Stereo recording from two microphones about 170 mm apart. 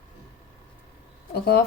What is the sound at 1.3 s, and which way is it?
Speech, 70° left (ahead or behind).